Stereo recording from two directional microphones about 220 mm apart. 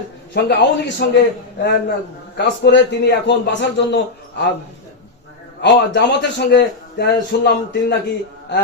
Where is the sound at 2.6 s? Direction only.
50° left (ahead or behind).